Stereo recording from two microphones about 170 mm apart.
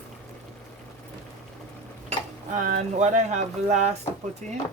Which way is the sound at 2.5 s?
50° right (ahead or behind).